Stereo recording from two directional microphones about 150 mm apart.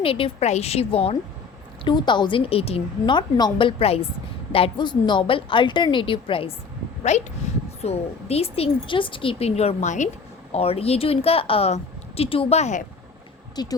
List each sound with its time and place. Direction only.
0.0 s a woman's voice: 40° left (ahead or behind)
7.1 s speech: 50° left (ahead or behind)
10.5 s a woman's voice: 40° left (ahead or behind)
13.6 s speech: 25° left (ahead or behind)